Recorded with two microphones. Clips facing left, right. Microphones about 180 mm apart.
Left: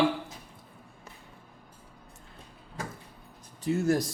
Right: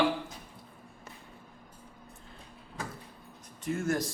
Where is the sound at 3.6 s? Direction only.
35° left (ahead or behind).